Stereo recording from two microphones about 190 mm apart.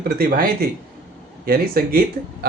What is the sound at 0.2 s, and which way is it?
Speech, 55° right (ahead or behind).